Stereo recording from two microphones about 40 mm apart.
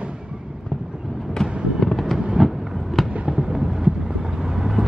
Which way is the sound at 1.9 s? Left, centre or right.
Centre.